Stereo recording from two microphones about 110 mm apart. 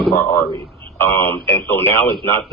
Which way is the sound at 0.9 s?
20° left (ahead or behind).